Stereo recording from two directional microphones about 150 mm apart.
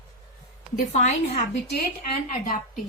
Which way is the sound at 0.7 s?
50° left (ahead or behind).